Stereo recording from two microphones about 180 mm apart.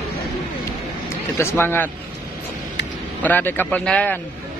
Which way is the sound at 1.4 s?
15° left (ahead or behind).